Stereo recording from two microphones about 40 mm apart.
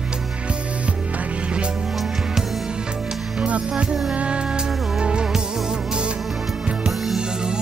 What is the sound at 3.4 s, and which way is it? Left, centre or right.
Music, right.